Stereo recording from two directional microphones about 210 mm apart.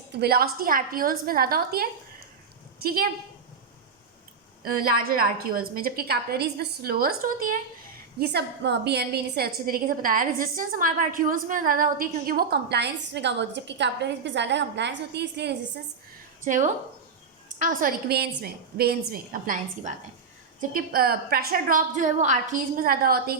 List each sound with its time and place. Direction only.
0.2 s a woman's voice: 45° right (ahead or behind)
4.6 s a woman's voice: 45° right (ahead or behind)
16.4 s a woman's voice: 35° right (ahead or behind)